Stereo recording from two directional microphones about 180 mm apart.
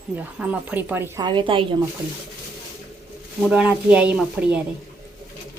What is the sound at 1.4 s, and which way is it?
Speech, 30° right (ahead or behind).